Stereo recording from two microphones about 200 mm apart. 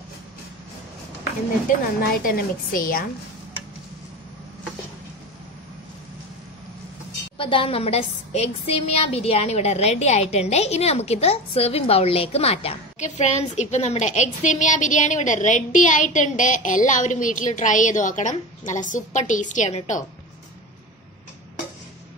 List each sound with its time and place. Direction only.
2.2 s a woman's voice: 45° left (ahead or behind)
7.3 s a woman's voice: 25° left (ahead or behind)